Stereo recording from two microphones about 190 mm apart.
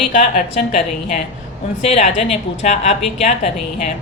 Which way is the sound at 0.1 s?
40° left (ahead or behind).